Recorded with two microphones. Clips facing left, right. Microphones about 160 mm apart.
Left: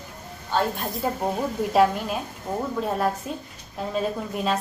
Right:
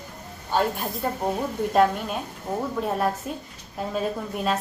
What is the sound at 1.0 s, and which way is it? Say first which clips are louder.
A woman's voice: left 1 dB; 5° left (ahead or behind).